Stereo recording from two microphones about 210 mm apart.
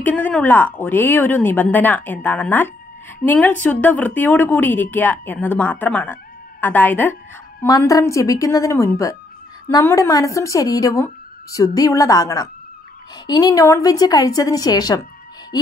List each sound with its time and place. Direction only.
0.0 s speech: 5° left (ahead or behind)